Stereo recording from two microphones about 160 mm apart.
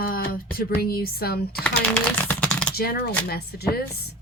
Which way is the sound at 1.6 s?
10° left (ahead or behind).